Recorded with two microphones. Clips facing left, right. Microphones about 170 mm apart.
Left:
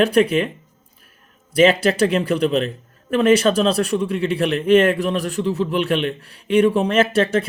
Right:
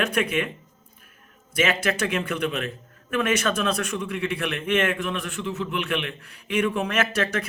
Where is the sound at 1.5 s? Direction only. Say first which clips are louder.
Left 9 dB; 30° left (ahead or behind).